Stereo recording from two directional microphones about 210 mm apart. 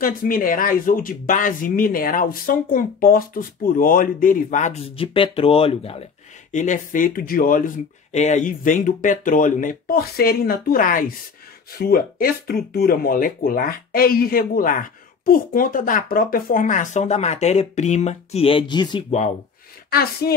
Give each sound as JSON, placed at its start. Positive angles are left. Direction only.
{"t": 0.0, "sound": "speech", "side_deg": 40}
{"t": 19.9, "sound": "speech", "side_deg": 45}